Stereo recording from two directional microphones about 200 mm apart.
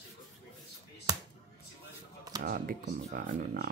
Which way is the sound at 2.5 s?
50° right (ahead or behind).